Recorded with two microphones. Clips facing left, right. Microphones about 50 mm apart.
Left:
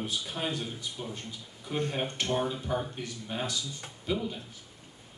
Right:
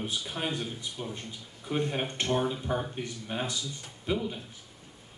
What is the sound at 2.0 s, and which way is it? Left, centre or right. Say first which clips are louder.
Speech: even; right.